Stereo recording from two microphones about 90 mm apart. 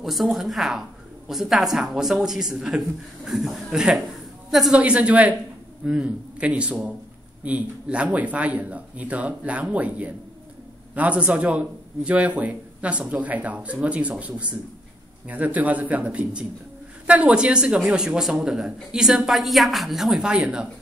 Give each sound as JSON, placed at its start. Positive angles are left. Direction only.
{"t": 0.0, "sound": "a woman's voice", "side_deg": 0}